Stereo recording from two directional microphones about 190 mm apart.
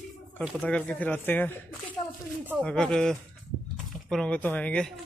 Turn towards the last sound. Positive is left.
turn(degrees=5)  # may be behind; listen again after turning